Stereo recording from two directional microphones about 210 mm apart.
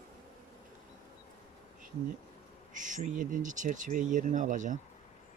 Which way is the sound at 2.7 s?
35° right (ahead or behind).